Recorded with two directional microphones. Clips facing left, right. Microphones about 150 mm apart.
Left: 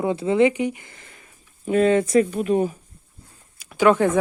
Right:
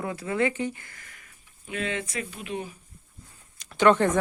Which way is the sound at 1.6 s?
45° left (ahead or behind).